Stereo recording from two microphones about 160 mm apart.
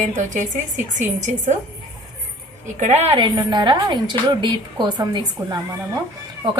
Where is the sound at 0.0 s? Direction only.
50° right (ahead or behind).